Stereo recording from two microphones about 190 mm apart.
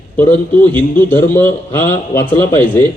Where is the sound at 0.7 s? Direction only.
10° left (ahead or behind).